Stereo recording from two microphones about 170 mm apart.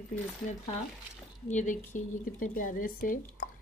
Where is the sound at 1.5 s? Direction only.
45° left (ahead or behind).